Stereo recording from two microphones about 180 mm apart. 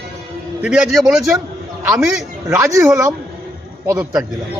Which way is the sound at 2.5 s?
15° right (ahead or behind).